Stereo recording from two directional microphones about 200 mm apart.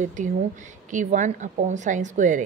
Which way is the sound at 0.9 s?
40° right (ahead or behind).